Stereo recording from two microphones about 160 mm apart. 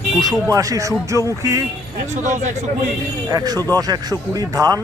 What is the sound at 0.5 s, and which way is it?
Speech, 20° right (ahead or behind).